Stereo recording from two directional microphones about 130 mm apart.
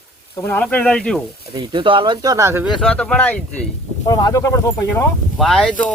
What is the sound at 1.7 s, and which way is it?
Speech, 40° right (ahead or behind).